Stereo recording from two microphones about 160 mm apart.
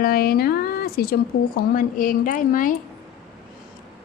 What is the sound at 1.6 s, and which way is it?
A woman's voice, 60° left (ahead or behind).